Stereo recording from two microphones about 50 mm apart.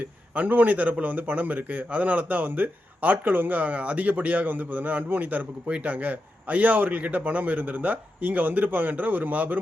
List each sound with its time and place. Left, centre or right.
0.0 s speech: right